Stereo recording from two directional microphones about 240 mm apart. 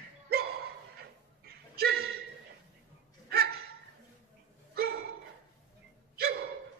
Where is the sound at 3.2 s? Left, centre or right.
Right.